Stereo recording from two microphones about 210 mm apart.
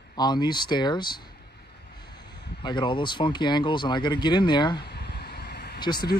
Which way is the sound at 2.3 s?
50° left (ahead or behind).